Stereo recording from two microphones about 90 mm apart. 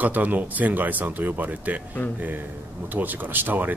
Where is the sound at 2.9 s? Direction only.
20° right (ahead or behind).